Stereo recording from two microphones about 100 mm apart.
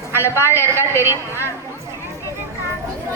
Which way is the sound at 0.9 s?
25° right (ahead or behind).